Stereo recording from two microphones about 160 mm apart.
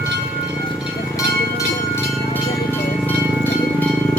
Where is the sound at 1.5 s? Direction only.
15° left (ahead or behind).